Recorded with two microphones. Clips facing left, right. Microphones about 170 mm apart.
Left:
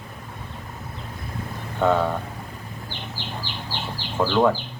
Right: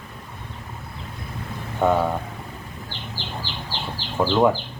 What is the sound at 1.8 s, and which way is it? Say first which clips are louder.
Speech: right 1 dB; 10° right (ahead or behind).